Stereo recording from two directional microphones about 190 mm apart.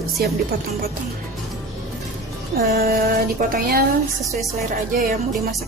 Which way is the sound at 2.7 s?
55° right (ahead or behind).